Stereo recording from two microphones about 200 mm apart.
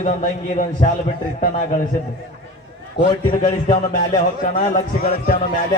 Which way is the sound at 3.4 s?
40° left (ahead or behind).